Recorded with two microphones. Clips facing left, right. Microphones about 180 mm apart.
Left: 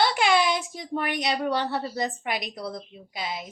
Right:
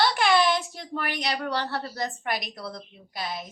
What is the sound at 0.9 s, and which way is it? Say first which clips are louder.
A woman's voice: left 3 dB; 20° left (ahead or behind).